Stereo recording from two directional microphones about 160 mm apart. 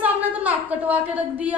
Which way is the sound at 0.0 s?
10° right (ahead or behind).